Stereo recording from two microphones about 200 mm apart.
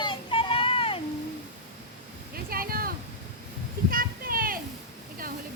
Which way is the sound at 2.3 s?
45° right (ahead or behind).